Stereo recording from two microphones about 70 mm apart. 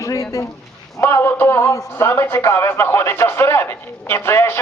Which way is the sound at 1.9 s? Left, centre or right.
Left.